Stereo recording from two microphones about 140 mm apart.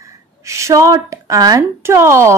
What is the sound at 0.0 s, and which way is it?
A woman's voice, 20° right (ahead or behind).